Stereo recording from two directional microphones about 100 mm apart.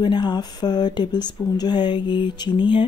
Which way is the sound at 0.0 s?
50° left (ahead or behind).